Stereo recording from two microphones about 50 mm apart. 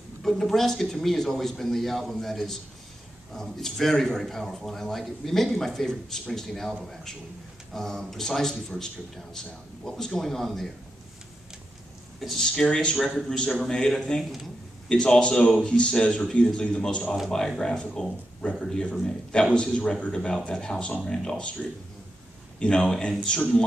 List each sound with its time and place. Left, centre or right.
0.2 s speech: centre
12.2 s speech: centre
22.6 s speech: centre